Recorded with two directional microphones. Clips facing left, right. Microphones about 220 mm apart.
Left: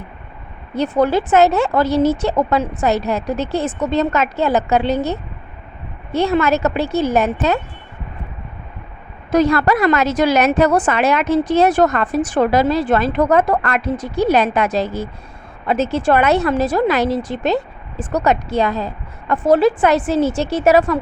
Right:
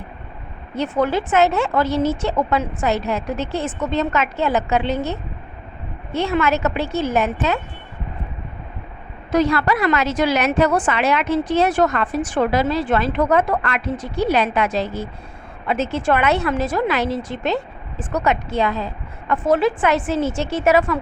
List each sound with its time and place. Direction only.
0.8 s a woman's voice: 35° left (ahead or behind)
9.3 s a woman's voice: 45° left (ahead or behind)